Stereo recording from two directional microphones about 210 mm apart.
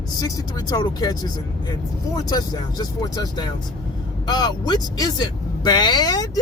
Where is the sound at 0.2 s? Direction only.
15° left (ahead or behind).